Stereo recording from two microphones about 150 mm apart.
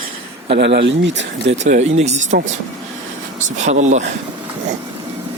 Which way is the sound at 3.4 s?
55° right (ahead or behind).